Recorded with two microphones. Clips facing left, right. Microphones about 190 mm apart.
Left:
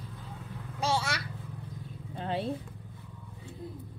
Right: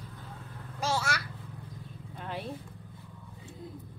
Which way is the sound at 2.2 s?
30° left (ahead or behind).